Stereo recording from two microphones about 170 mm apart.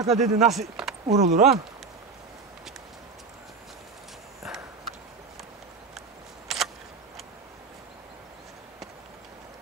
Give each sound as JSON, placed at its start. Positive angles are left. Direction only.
{"t": 0.0, "sound": "speech", "side_deg": -40}
{"t": 0.5, "sound": "speech", "side_deg": 0}
{"t": 1.0, "sound": "speech", "side_deg": -40}
{"t": 5.9, "sound": "a sound", "side_deg": 0}